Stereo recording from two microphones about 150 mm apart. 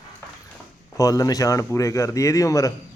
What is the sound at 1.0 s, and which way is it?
A man's voice, 25° left (ahead or behind).